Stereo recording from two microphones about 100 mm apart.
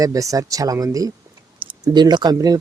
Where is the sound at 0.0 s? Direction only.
35° right (ahead or behind).